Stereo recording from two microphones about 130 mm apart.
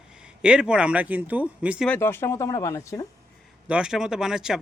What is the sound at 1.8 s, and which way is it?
Speech, 15° left (ahead or behind).